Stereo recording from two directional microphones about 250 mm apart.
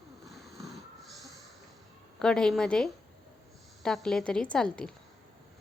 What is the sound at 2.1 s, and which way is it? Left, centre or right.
A woman's voice, centre.